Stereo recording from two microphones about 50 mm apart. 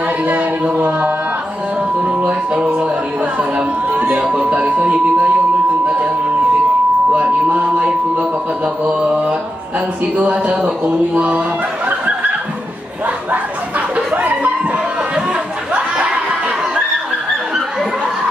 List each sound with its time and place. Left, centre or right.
0.2 s a sound: right
0.7 s music: right
2.0 s speech: right
4.1 s speech: right
7.1 s music: centre
7.4 s speech: right
13.0 s a sound: right